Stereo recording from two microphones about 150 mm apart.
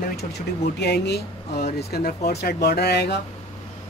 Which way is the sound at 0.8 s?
90° left.